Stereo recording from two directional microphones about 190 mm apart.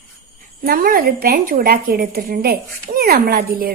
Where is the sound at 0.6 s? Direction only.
50° right (ahead or behind).